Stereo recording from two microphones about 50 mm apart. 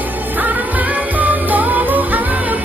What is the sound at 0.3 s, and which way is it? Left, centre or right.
Music, right.